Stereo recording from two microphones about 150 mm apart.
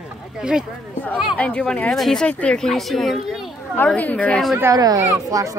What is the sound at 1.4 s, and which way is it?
A woman's voice, 5° left (ahead or behind).